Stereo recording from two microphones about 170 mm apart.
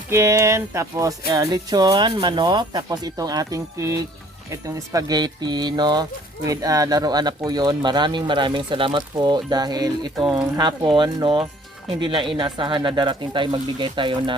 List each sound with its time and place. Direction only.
0.1 s speech: 15° right (ahead or behind)